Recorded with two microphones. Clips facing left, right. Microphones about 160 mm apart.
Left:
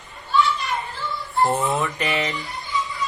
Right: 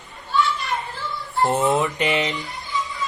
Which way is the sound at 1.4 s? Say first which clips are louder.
Right 2 dB; 15° right (ahead or behind).